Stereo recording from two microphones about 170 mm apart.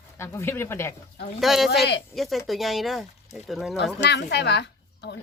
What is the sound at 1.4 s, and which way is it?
Speech, centre (ahead or behind).